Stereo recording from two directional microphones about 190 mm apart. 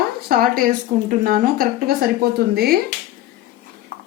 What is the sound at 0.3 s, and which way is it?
Speech, 50° right (ahead or behind).